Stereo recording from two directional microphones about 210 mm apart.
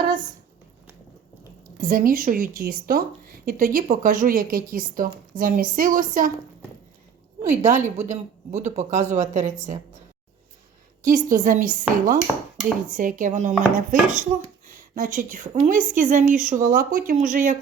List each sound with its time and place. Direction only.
1.8 s a woman's voice: 40° right (ahead or behind)
7.4 s a woman's voice: 35° right (ahead or behind)
11.0 s a woman's voice: 40° right (ahead or behind)